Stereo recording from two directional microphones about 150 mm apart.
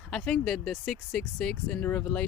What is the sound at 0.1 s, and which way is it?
Speech, 5° left (ahead or behind).